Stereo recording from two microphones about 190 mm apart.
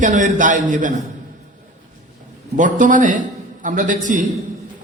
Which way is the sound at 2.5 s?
40° right (ahead or behind).